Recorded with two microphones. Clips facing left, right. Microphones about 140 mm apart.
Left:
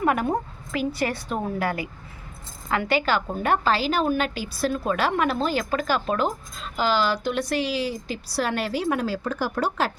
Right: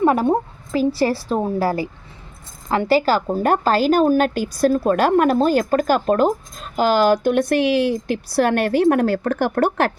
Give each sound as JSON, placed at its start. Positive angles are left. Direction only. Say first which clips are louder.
{"t": 0.0, "sound": "a woman's voice", "louder": "right 6 dB", "side_deg": -30}